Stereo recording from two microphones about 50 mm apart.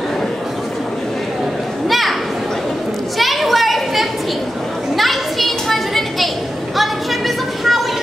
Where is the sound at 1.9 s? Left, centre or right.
Centre.